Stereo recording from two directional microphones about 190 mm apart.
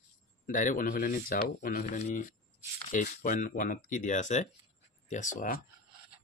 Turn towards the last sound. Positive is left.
turn(degrees=40)  # may be behind; listen again after turning